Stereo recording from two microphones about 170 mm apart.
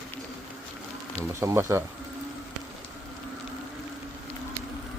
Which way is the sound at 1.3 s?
15° right (ahead or behind).